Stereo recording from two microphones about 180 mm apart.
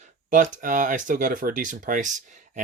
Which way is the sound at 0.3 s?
45° right (ahead or behind).